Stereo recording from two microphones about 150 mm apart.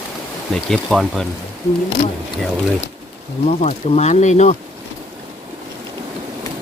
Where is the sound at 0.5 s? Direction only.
Centre (ahead or behind).